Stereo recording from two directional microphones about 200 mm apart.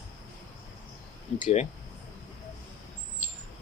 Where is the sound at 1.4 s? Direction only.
35° left (ahead or behind).